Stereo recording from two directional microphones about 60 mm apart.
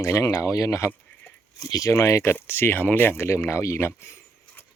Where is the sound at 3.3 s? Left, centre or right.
Left.